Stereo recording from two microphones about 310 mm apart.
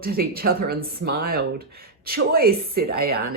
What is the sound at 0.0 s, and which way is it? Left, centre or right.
Speech, right.